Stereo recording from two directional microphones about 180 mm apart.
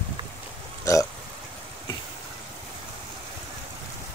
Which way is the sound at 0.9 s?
15° left (ahead or behind).